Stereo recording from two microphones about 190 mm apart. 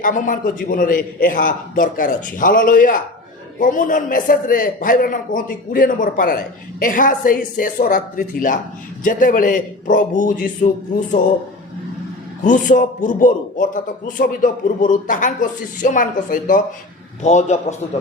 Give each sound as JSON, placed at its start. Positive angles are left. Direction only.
{"t": 0.0, "sound": "a man's voice", "side_deg": 45}
{"t": 12.5, "sound": "a man's voice", "side_deg": 45}